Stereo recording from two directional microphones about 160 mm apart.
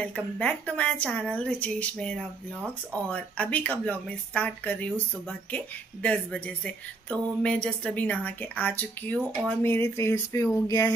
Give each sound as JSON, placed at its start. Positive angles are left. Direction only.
{"t": 0.0, "sound": "speech", "side_deg": 5}
{"t": 6.0, "sound": "speech", "side_deg": 10}